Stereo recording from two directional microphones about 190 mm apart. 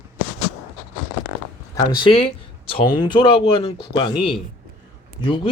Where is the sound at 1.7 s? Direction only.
20° left (ahead or behind).